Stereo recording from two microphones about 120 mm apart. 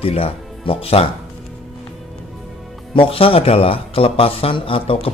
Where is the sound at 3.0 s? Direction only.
50° left (ahead or behind).